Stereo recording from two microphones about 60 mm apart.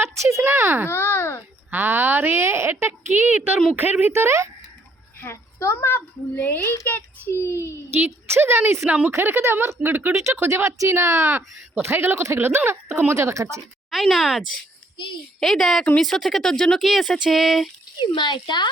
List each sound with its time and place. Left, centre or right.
0.0 s a sound: right
0.4 s a woman's voice: right
0.9 s a child's voice: left
1.7 s a woman's voice: right
4.0 s speech: right
5.3 s a woman's voice: left
7.9 s a woman's voice: right
10.2 s speech: right
12.2 s speech: right
13.9 s speech: centre